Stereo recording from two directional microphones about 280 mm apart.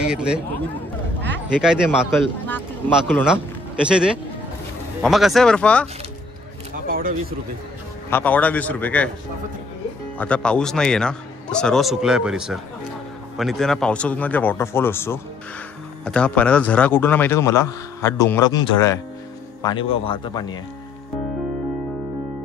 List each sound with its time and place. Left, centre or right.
0.0 s a man's voice: centre
6.9 s speech: right
8.1 s a man's voice: centre
10.1 s a man's voice: centre